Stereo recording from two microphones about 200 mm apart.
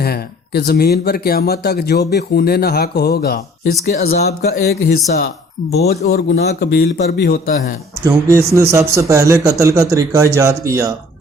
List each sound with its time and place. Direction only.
0.0 s speech: 50° left (ahead or behind)
8.0 s speech: 15° right (ahead or behind)